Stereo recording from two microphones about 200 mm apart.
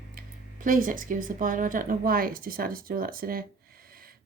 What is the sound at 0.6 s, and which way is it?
Speech, 40° right (ahead or behind).